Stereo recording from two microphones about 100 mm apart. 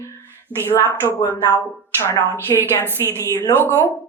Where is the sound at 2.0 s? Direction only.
25° left (ahead or behind).